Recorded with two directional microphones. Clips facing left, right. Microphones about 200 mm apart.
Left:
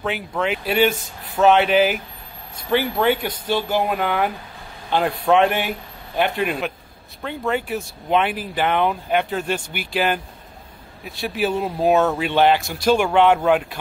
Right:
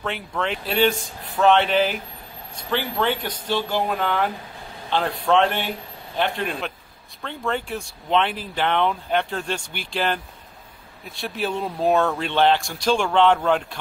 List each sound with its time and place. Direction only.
0.4 s speech: 5° left (ahead or behind)